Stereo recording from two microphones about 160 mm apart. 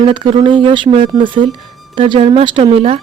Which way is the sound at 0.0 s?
30° right (ahead or behind).